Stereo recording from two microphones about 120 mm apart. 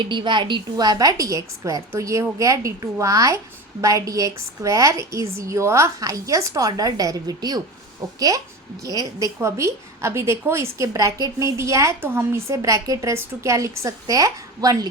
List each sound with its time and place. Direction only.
0.0 s a woman's voice: 40° right (ahead or behind)
8.8 s a woman's voice: 30° right (ahead or behind)